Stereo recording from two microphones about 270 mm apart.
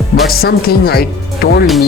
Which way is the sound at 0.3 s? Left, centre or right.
Left.